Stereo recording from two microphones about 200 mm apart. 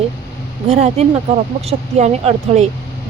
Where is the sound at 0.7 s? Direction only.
35° right (ahead or behind).